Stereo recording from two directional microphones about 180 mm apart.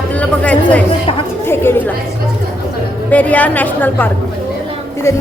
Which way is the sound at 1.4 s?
15° left (ahead or behind).